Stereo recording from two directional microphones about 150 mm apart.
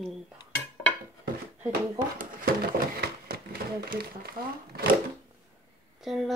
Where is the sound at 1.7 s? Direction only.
80° right.